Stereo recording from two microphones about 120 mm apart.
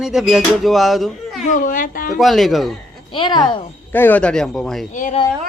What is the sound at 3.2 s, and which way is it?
Speech, 40° left (ahead or behind).